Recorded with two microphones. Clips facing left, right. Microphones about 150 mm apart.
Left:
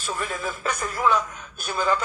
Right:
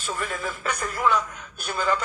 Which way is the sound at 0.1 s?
10° left (ahead or behind).